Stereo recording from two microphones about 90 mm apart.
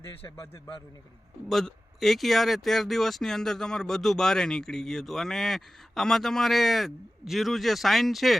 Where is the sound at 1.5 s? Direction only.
Centre (ahead or behind).